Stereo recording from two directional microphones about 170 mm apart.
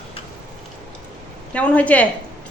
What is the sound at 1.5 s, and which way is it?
Speech, 10° left (ahead or behind).